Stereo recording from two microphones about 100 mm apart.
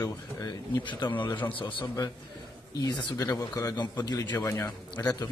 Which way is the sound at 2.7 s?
40° left (ahead or behind).